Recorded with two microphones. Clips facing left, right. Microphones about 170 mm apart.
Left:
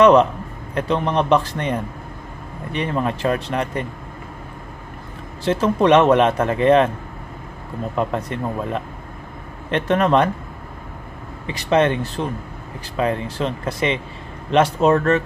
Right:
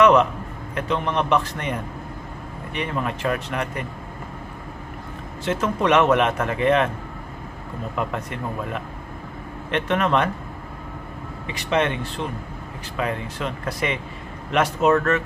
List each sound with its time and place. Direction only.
0.0 s a sound: 30° left (ahead or behind)
0.7 s a man's voice: 35° left (ahead or behind)
5.4 s a man's voice: 30° left (ahead or behind)
8.1 s a man's voice: 30° left (ahead or behind)
11.4 s a man's voice: 35° left (ahead or behind)